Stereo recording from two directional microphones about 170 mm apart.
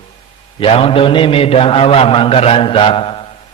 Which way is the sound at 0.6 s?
35° left (ahead or behind).